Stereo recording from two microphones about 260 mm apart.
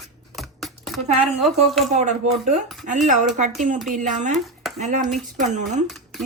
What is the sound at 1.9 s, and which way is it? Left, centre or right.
Speech, right.